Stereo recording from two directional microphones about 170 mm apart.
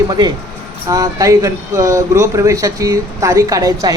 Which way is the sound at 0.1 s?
25° right (ahead or behind).